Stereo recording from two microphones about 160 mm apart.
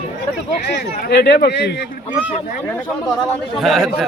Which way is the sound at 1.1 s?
90° left.